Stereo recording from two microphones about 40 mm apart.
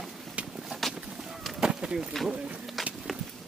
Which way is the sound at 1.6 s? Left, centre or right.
Centre.